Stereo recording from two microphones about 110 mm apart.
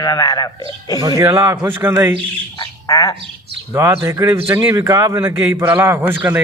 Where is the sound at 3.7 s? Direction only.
20° right (ahead or behind).